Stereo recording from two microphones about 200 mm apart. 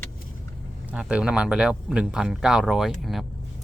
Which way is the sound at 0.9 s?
5° right (ahead or behind).